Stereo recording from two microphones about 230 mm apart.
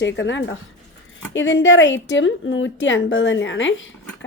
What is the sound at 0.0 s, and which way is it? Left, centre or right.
A woman's voice, left.